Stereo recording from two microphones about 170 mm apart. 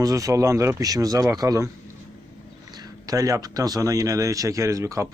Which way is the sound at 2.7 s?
20° right (ahead or behind).